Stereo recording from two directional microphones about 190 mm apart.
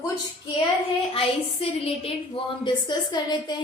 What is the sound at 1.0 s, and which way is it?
A woman's voice, 30° left (ahead or behind).